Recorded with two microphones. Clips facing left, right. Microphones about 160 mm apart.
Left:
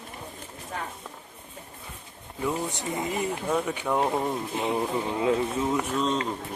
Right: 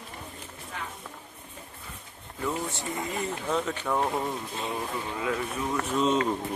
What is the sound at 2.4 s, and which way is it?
Speech, 15° left (ahead or behind).